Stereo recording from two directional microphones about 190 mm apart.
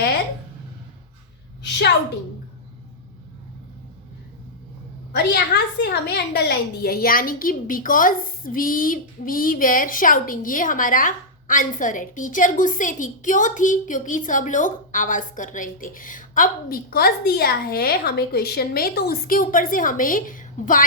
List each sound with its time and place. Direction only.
5.1 s a woman's voice: 55° left (ahead or behind)